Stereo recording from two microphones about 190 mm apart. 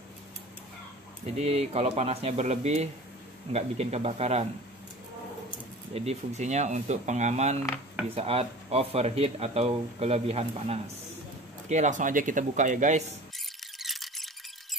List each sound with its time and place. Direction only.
1.4 s speech: 35° right (ahead or behind)
5.9 s speech: 35° right (ahead or behind)
13.7 s a sound: centre (ahead or behind)